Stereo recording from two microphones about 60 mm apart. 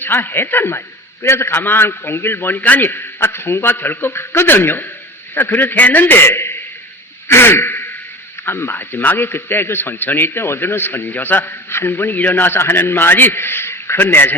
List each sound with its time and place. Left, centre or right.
0.0 s a man's voice: left
7.3 s a sound: left
8.4 s a man's voice: left